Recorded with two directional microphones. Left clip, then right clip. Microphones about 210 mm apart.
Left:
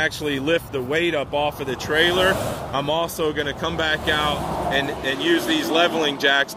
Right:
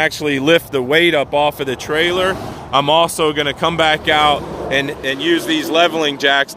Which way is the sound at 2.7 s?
35° right (ahead or behind).